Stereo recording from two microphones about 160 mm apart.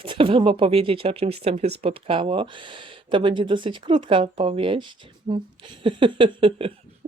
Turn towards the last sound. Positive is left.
turn(degrees=-35)  # may be behind; listen again after turning